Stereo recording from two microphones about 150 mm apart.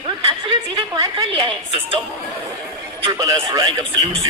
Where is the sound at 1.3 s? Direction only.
35° right (ahead or behind).